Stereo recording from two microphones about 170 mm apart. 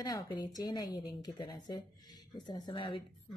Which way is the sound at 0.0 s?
20° left (ahead or behind).